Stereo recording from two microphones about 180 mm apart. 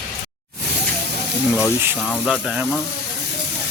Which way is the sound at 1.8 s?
10° right (ahead or behind).